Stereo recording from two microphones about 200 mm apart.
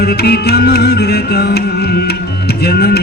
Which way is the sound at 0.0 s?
50° left (ahead or behind).